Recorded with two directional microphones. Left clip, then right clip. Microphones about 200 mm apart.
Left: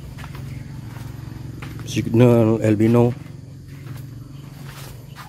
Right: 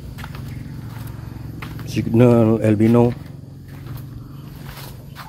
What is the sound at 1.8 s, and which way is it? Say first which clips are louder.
Speech: right 1 dB; 15° left (ahead or behind).